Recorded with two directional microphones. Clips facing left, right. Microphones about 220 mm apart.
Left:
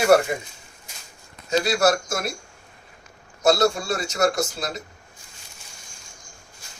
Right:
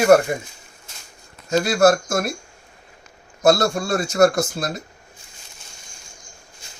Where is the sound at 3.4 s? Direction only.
50° right (ahead or behind).